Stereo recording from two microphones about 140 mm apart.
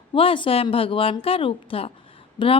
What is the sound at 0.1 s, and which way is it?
A woman's voice, 40° left (ahead or behind).